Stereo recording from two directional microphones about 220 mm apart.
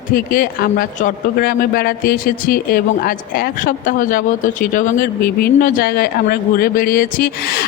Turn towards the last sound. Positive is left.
turn(degrees=45)  # may be behind; listen again after turning